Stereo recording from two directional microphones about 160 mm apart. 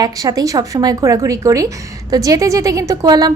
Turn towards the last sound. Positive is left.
turn(degrees=-25)  # may be behind; listen again after turning